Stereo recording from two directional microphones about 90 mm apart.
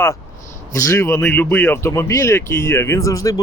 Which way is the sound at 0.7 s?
35° left (ahead or behind).